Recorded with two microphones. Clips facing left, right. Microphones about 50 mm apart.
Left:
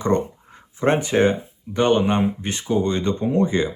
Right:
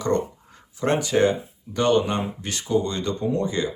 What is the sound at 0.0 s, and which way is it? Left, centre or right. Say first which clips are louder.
Speech: left 2 dB; left.